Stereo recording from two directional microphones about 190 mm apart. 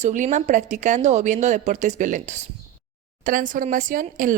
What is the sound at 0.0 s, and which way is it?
A woman's voice, 40° right (ahead or behind).